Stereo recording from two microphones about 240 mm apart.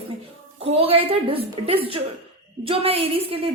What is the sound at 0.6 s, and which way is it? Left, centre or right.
A woman's voice, right.